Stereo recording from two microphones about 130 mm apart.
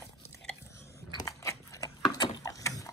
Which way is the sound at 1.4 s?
25° left (ahead or behind).